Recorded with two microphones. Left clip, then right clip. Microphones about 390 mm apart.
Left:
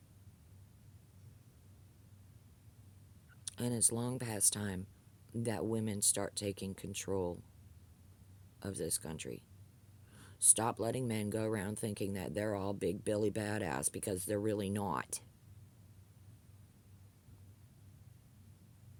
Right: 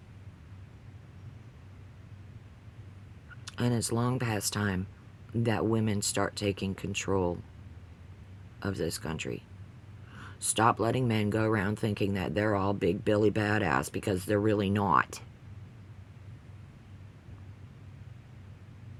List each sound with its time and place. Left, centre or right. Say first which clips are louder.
3.4 s speech: right 6 dB; left
8.5 s speech: right 7 dB; left